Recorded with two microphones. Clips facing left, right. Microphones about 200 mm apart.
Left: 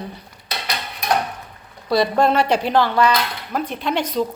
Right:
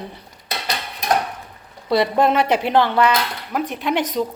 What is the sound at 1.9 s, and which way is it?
Speech, 20° right (ahead or behind).